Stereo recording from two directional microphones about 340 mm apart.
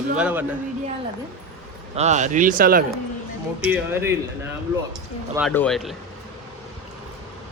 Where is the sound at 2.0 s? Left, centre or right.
Right.